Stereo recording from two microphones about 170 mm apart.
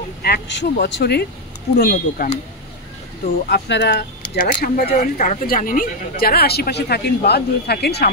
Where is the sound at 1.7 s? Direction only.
60° left (ahead or behind).